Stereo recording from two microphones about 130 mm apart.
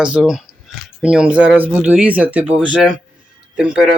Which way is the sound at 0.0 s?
5° right (ahead or behind).